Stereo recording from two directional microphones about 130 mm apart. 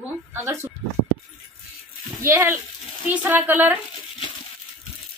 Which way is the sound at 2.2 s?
20° right (ahead or behind).